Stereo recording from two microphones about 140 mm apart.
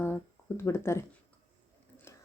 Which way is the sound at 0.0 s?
15° left (ahead or behind).